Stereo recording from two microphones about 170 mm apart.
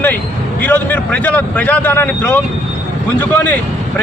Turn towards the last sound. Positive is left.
turn(degrees=10)  # may be behind; listen again after turning